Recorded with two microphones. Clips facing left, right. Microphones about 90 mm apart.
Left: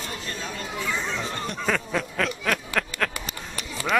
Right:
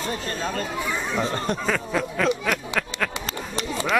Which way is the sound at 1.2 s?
35° right (ahead or behind).